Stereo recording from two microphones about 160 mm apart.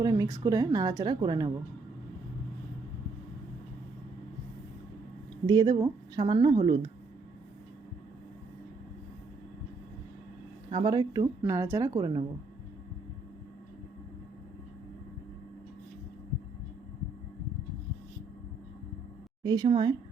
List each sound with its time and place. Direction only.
0.0 s a woman's voice: 20° right (ahead or behind)
5.5 s a woman's voice: 25° right (ahead or behind)
10.7 s a woman's voice: 30° right (ahead or behind)
19.4 s a woman's voice: 25° right (ahead or behind)